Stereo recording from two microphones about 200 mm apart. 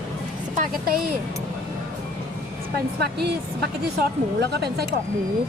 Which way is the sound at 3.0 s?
55° right (ahead or behind).